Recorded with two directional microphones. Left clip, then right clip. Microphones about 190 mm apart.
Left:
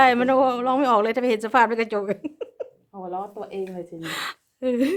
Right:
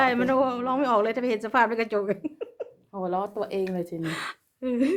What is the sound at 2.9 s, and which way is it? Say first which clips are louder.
Speech: right 4 dB; 55° right (ahead or behind).